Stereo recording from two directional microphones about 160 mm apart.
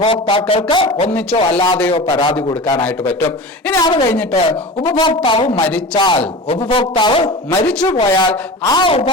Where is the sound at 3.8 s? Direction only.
25° left (ahead or behind).